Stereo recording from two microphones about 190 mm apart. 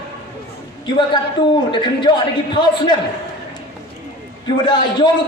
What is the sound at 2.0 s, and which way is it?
Speech, 25° left (ahead or behind).